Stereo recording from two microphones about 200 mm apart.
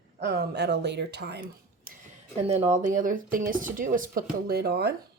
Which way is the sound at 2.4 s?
35° right (ahead or behind).